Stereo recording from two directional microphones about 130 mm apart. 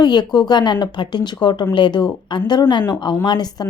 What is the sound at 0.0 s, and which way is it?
Speech, 35° left (ahead or behind).